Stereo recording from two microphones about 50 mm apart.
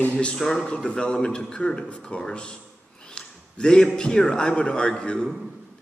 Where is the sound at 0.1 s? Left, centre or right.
Left.